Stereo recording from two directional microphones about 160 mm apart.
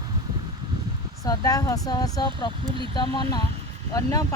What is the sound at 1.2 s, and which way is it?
Speech, 20° left (ahead or behind).